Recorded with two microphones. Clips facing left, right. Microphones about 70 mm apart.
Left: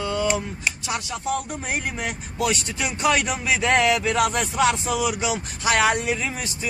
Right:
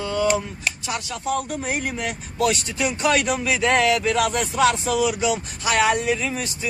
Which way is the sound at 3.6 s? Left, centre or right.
Left.